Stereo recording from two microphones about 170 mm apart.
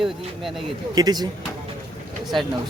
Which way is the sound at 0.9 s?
25° right (ahead or behind).